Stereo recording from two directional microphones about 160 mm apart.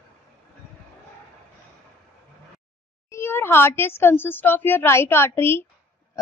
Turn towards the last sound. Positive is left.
turn(degrees=15)  # may be behind; listen again after turning